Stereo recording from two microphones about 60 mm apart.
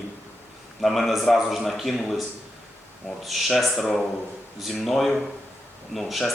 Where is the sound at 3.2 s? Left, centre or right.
Centre.